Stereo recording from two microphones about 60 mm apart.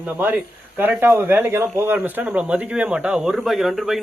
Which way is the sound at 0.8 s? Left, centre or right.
Right.